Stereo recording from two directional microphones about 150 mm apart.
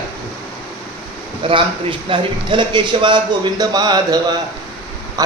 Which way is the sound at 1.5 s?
35° right (ahead or behind).